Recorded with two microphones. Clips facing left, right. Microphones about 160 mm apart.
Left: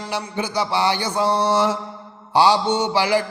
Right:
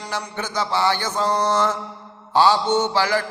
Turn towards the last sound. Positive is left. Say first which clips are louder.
# left 1 dB
turn(degrees=15)  # may be behind; listen again after turning